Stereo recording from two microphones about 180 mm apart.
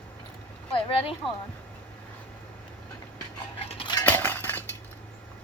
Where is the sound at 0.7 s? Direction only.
30° left (ahead or behind).